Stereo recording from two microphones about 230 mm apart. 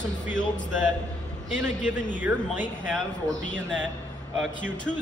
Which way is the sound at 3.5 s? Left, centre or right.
Centre.